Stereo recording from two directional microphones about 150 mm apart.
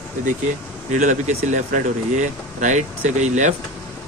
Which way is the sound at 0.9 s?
55° right (ahead or behind).